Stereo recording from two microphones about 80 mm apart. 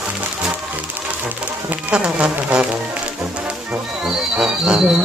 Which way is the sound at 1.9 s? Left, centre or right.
Centre.